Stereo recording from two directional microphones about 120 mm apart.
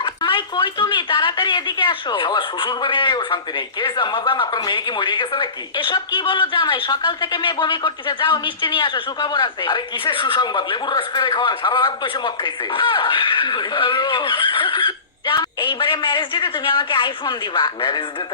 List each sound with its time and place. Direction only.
0.0 s a woman's voice: 45° left (ahead or behind)